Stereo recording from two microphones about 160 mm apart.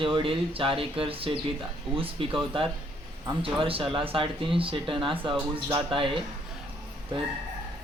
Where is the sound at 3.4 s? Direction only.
35° right (ahead or behind).